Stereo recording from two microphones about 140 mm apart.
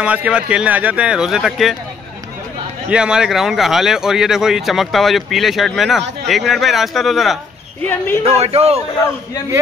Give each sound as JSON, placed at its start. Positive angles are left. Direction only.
{"t": 0.0, "sound": "speech", "side_deg": -10}
{"t": 2.9, "sound": "speech", "side_deg": -5}
{"t": 8.2, "sound": "a man's voice", "side_deg": -45}